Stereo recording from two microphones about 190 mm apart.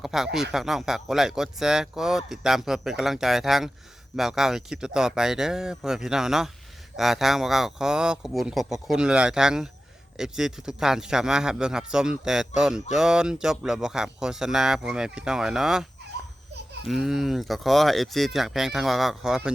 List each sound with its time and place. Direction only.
0.0 s speech: centre (ahead or behind)